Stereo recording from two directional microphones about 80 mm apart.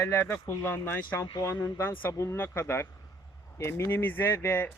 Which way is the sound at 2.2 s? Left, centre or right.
Left.